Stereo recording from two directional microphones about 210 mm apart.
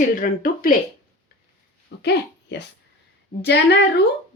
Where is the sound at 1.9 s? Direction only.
55° left (ahead or behind).